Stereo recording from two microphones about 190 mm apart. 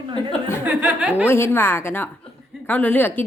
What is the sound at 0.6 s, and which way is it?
Speech, 5° right (ahead or behind).